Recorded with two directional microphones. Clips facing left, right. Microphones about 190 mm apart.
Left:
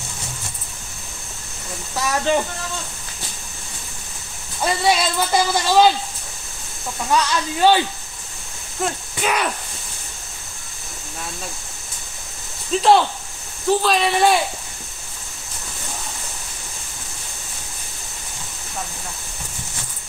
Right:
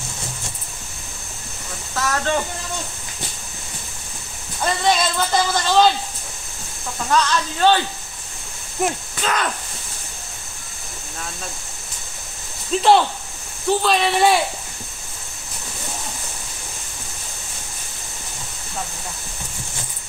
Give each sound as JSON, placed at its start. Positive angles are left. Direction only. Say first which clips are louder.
{"t": 2.0, "sound": "speech", "louder": "left 2 dB", "side_deg": 15}
{"t": 4.6, "sound": "speech", "louder": "even", "side_deg": 10}
{"t": 7.1, "sound": "speech", "louder": "even", "side_deg": 10}
{"t": 9.2, "sound": "speech", "louder": "left 2 dB", "side_deg": 10}
{"t": 12.7, "sound": "speech", "louder": "even", "side_deg": 0}